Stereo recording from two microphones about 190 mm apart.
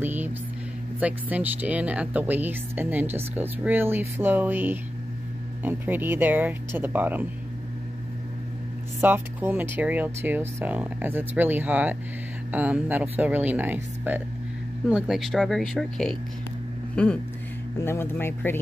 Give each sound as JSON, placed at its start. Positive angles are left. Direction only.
{"t": 0.0, "sound": "music", "side_deg": -10}
{"t": 0.9, "sound": "speech", "side_deg": -10}
{"t": 9.0, "sound": "speech", "side_deg": -10}